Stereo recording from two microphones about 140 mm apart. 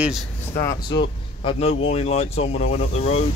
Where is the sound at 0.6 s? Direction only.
20° left (ahead or behind).